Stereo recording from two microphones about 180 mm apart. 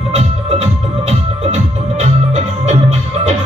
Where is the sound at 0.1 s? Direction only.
40° right (ahead or behind).